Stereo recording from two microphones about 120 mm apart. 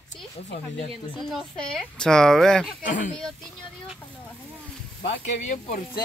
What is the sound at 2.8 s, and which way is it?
Speech, 90° left.